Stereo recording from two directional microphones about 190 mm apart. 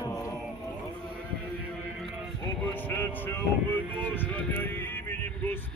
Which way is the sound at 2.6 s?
10° left (ahead or behind).